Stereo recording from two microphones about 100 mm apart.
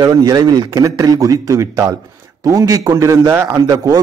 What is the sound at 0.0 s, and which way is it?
A man's voice, 40° right (ahead or behind).